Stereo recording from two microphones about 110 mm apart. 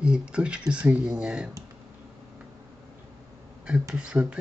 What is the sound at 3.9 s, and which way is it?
Speech, 10° right (ahead or behind).